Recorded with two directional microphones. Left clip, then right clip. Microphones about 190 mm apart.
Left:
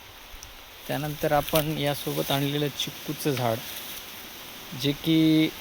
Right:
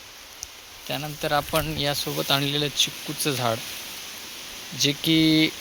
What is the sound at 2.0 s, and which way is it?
Speech, 5° left (ahead or behind).